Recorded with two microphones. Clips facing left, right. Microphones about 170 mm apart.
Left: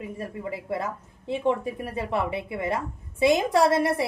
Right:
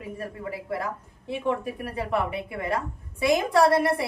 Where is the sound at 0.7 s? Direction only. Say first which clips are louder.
Left 1 dB; 25° left (ahead or behind).